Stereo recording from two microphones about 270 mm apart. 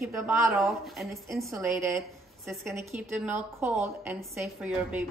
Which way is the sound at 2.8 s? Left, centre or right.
Centre.